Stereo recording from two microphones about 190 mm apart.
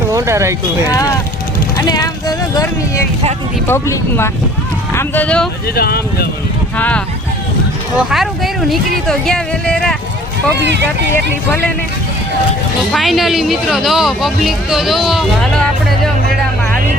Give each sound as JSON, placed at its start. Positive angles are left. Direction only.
{"t": 0.1, "sound": "speech", "side_deg": -15}
{"t": 0.9, "sound": "speech", "side_deg": 20}
{"t": 5.7, "sound": "speech", "side_deg": 55}
{"t": 6.7, "sound": "speech", "side_deg": 10}
{"t": 10.6, "sound": "speech", "side_deg": -65}
{"t": 12.9, "sound": "speech", "side_deg": 0}